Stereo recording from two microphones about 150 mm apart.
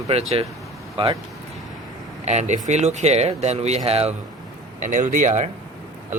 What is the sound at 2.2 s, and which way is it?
Speech, 50° right (ahead or behind).